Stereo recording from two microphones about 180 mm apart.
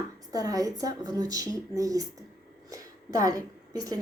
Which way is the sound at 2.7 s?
20° right (ahead or behind).